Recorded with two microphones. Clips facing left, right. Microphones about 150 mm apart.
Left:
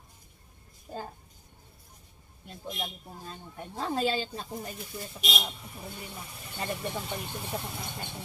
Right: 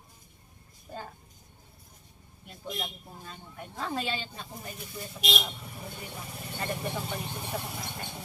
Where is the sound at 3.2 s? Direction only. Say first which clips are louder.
Left 2 dB; 35° left (ahead or behind).